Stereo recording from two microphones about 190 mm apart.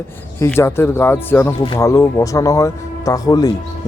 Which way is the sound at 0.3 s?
15° left (ahead or behind).